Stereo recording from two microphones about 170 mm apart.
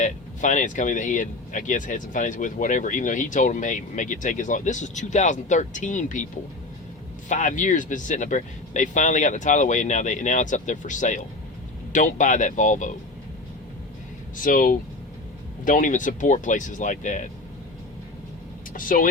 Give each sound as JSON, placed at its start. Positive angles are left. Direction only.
{"t": 0.0, "sound": "speech", "side_deg": 45}
{"t": 7.3, "sound": "speech", "side_deg": 50}
{"t": 14.4, "sound": "speech", "side_deg": 50}
{"t": 18.7, "sound": "speech", "side_deg": 55}